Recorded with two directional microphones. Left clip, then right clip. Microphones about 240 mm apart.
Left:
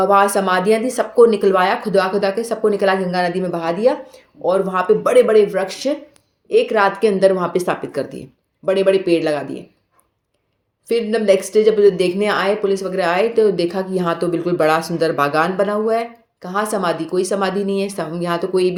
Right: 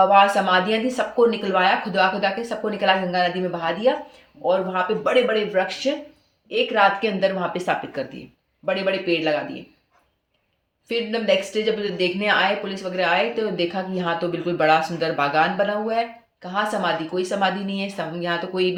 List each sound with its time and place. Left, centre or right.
0.0 s speech: left
10.8 s speech: left